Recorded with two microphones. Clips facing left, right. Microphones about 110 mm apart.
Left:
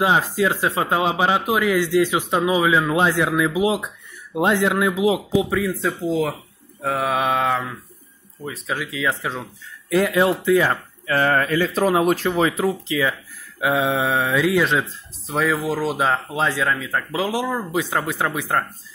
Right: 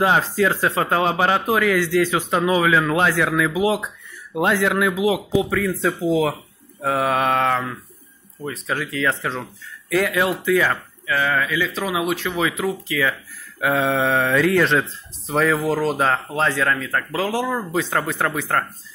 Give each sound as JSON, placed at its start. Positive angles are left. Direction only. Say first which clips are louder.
{"t": 0.0, "sound": "speech", "louder": "right 1 dB", "side_deg": 15}
{"t": 5.7, "sound": "mantra", "louder": "right 2 dB", "side_deg": 0}
{"t": 5.9, "sound": "speech", "louder": "right 4 dB", "side_deg": -5}
{"t": 6.8, "sound": "mantra", "louder": "right 2 dB", "side_deg": 0}
{"t": 9.2, "sound": "speech", "louder": "right 1 dB", "side_deg": 10}
{"t": 9.8, "sound": "speech", "louder": "left 2 dB", "side_deg": 25}
{"t": 11.1, "sound": "a man's voice", "louder": "left 2 dB", "side_deg": 45}
{"t": 12.6, "sound": "speech", "louder": "left 1 dB", "side_deg": 20}